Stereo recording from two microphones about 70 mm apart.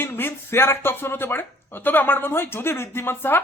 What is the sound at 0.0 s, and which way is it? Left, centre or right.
Speech, left.